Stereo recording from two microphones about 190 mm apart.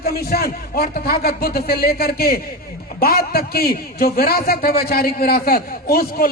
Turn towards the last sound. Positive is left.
turn(degrees=50)  # may be behind; listen again after turning